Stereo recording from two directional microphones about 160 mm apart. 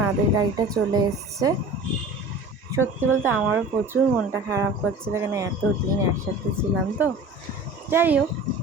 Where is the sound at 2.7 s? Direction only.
15° right (ahead or behind).